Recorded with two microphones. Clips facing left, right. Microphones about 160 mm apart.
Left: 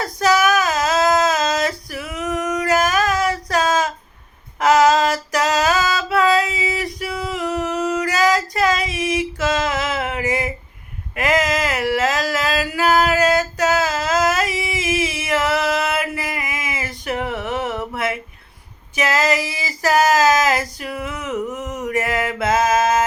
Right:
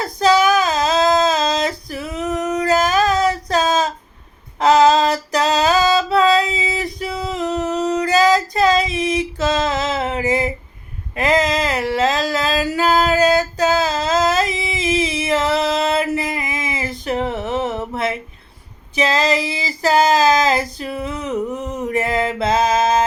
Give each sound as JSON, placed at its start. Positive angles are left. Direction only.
{"t": 0.0, "sound": "child singing", "side_deg": -25}
{"t": 4.6, "sound": "female singing", "side_deg": -25}
{"t": 11.1, "sound": "a sound", "side_deg": -30}